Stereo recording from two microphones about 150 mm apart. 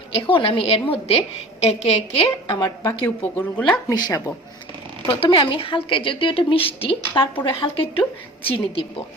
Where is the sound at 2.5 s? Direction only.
25° left (ahead or behind).